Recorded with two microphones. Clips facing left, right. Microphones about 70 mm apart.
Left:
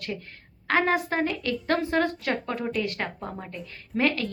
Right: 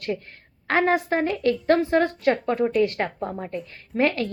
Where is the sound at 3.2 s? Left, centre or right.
Centre.